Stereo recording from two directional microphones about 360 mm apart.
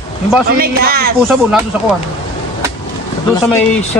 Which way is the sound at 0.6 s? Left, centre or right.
Right.